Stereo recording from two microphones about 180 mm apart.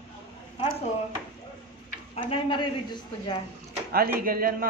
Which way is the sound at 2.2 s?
25° left (ahead or behind).